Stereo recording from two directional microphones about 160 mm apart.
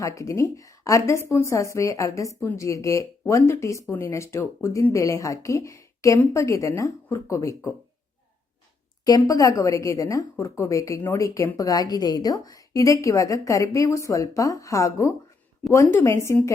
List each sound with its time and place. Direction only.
0.0 s a woman's voice: 20° left (ahead or behind)
9.0 s a woman's voice: 25° left (ahead or behind)